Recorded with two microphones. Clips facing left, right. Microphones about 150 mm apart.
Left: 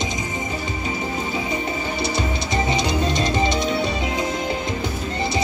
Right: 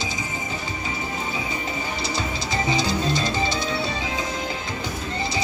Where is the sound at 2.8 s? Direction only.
20° left (ahead or behind).